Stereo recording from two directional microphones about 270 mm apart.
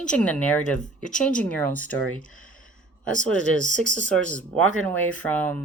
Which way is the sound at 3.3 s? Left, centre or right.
Right.